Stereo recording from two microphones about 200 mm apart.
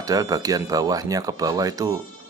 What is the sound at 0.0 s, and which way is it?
Speech, 15° right (ahead or behind).